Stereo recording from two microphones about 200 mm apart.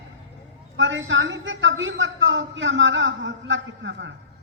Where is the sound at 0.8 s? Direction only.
70° right (ahead or behind).